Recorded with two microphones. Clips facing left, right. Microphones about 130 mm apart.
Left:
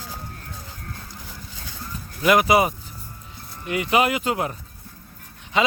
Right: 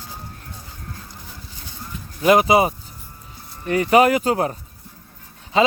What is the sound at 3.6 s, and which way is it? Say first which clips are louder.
Speech: right 6 dB; 40° right (ahead or behind).